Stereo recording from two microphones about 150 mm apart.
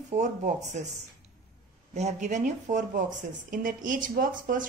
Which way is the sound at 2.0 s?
50° right (ahead or behind).